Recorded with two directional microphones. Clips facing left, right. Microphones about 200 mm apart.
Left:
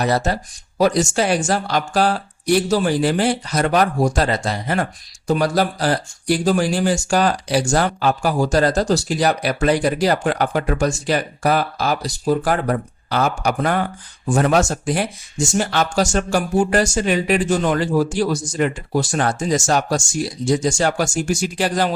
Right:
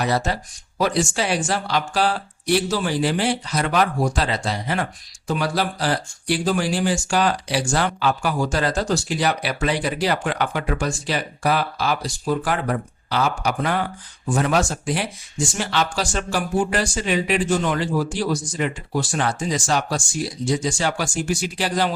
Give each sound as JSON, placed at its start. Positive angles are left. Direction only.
{"t": 0.0, "sound": "speech", "side_deg": 45}